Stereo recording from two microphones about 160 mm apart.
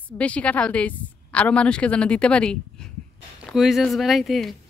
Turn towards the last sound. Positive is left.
turn(degrees=0)  # may be behind; listen again after turning